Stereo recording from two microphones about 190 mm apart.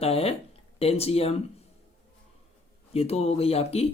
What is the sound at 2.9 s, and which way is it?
Speech, 35° left (ahead or behind).